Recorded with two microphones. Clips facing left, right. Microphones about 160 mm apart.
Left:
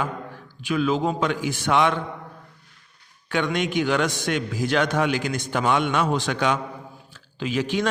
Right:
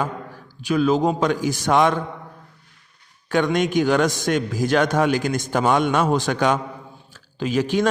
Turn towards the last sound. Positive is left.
turn(degrees=-45)  # may be behind; listen again after turning